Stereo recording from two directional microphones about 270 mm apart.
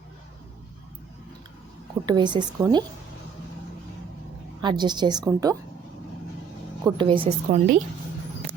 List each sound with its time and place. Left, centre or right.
2.0 s a woman's voice: centre
4.6 s a woman's voice: centre
6.8 s a woman's voice: centre